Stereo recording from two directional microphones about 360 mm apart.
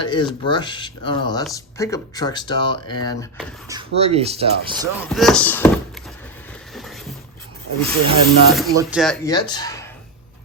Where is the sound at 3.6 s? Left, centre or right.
Centre.